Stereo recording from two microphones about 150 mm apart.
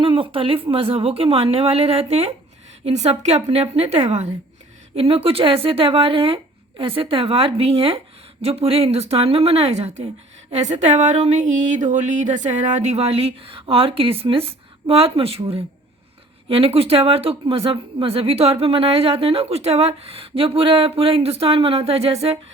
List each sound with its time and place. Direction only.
0.0 s speech: 35° right (ahead or behind)